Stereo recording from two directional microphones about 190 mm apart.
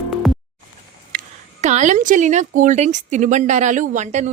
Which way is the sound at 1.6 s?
40° right (ahead or behind).